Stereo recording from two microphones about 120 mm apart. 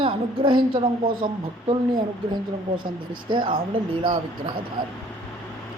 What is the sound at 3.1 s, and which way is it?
Speech, 40° right (ahead or behind).